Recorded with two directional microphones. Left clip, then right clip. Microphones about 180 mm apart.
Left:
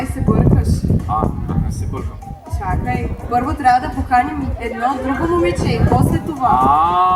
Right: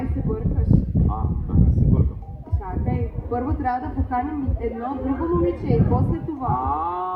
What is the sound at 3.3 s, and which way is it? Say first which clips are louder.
Speech: left 10 dB; 35° left (ahead or behind).